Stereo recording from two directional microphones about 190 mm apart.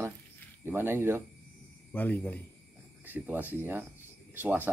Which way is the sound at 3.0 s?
10° right (ahead or behind).